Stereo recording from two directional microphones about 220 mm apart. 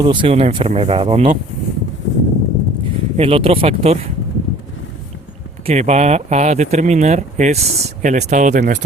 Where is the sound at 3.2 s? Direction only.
25° right (ahead or behind).